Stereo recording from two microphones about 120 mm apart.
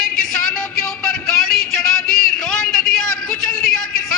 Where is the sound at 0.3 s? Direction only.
5° left (ahead or behind).